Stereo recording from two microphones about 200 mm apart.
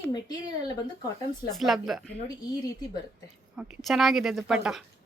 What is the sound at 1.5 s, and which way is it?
Speech, centre (ahead or behind).